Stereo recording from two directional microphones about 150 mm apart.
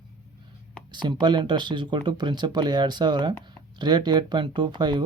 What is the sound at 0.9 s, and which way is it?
Speech, 30° right (ahead or behind).